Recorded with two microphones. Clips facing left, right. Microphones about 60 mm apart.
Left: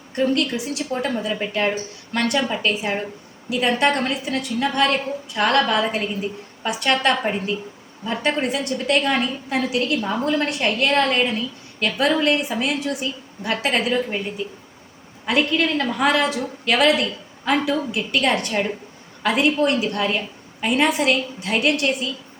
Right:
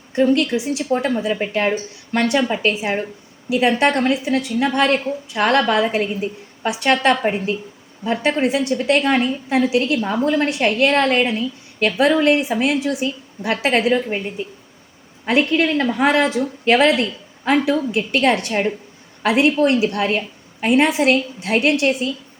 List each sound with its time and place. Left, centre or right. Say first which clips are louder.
0.2 s a woman's voice: right 4 dB; centre
15.3 s a woman's voice: right 3 dB; right
19.5 s a woman's voice: right 3 dB; right